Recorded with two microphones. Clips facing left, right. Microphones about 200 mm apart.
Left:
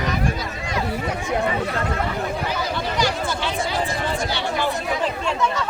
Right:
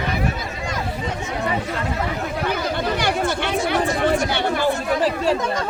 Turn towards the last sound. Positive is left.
turn(degrees=-40)  # may be behind; listen again after turning